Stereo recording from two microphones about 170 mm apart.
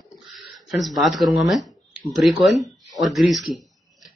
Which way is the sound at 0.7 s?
Centre (ahead or behind).